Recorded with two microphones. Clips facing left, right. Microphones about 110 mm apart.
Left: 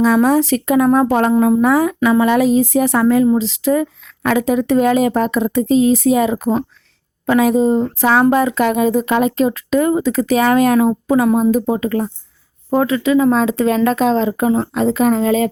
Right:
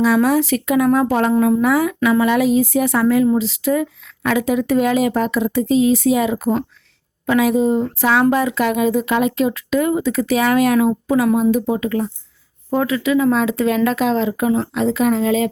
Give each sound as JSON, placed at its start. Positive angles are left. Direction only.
{"t": 0.0, "sound": "speech", "side_deg": 40}
{"t": 1.3, "sound": "speech", "side_deg": 25}